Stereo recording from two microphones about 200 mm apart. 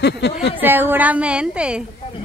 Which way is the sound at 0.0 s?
55° left (ahead or behind).